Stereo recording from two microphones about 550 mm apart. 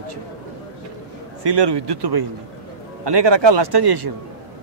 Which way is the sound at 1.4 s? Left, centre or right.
Right.